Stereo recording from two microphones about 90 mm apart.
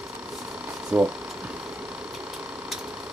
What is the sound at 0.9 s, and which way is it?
Speech, 15° right (ahead or behind).